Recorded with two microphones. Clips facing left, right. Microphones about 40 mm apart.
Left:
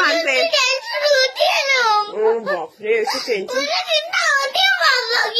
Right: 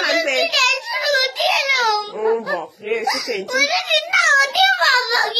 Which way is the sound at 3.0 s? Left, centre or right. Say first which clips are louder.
Left 1 dB; right.